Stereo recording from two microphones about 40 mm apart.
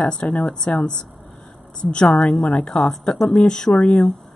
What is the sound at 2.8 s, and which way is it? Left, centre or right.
Speech, centre.